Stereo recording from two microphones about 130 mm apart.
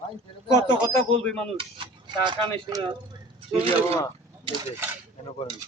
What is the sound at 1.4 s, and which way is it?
Speech, 40° right (ahead or behind).